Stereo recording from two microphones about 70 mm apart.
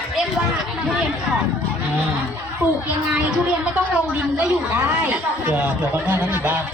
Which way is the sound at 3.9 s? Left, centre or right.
Centre.